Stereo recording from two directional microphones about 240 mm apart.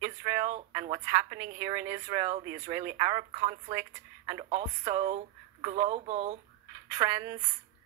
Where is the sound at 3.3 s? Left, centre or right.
Right.